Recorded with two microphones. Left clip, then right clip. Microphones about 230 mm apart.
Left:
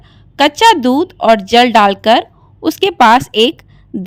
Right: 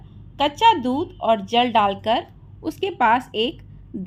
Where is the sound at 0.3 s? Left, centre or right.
Left.